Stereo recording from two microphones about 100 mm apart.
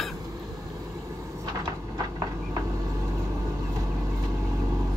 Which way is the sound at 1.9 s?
40° right (ahead or behind).